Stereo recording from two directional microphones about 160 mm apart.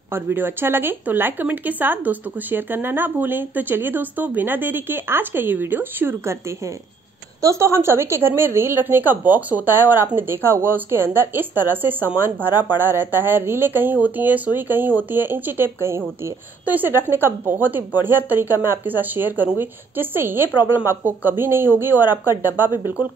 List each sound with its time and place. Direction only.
0.1 s speech: 15° right (ahead or behind)